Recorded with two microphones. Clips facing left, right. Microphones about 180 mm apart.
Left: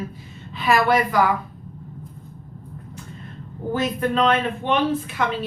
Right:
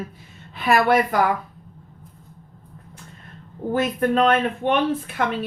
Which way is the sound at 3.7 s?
50° right (ahead or behind).